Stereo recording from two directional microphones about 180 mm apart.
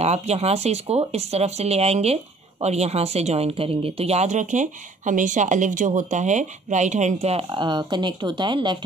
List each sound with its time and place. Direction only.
0.0 s speech: 35° right (ahead or behind)